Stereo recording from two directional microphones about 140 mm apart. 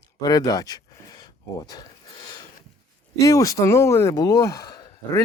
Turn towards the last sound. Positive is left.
turn(degrees=30)  # may be behind; listen again after turning